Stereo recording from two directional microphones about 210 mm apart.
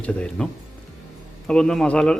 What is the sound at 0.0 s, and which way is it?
Speech, 5° left (ahead or behind).